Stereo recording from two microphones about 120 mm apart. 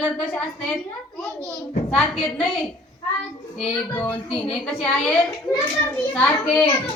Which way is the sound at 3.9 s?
15° left (ahead or behind).